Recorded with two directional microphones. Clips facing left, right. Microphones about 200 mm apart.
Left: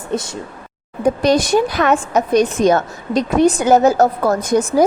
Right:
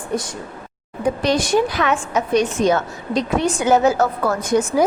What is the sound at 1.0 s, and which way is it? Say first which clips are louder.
A woman's voice: left 4 dB; 40° left (ahead or behind).